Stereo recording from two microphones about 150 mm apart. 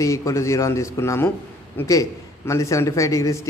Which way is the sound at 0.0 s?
20° left (ahead or behind).